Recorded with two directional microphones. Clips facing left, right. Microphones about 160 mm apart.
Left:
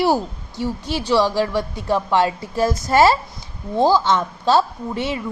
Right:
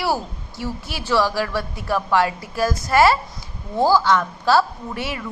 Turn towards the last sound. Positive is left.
turn(degrees=20)  # may be behind; listen again after turning